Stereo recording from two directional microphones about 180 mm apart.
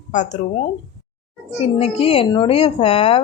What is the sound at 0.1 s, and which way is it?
Speech, 40° left (ahead or behind).